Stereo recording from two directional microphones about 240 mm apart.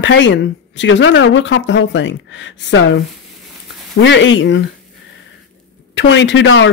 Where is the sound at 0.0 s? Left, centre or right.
Left.